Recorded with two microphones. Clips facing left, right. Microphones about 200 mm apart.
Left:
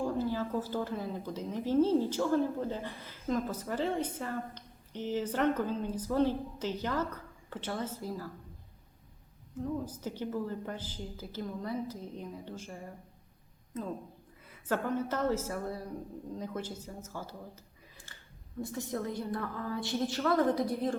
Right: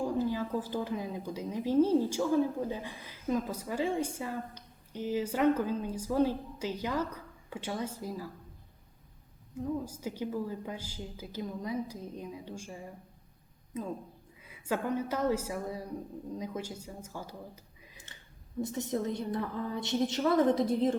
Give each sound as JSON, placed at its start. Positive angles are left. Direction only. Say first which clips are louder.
{"t": 0.2, "sound": "speech", "louder": "right 1 dB", "side_deg": -15}
{"t": 9.6, "sound": "speech", "louder": "right 1 dB", "side_deg": -10}
{"t": 14.4, "sound": "speech", "louder": "even", "side_deg": -10}
{"t": 18.6, "sound": "a woman's voice", "louder": "right 3 dB", "side_deg": -20}